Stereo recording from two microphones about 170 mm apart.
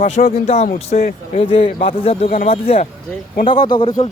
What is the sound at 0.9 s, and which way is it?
Speech, 55° left (ahead or behind).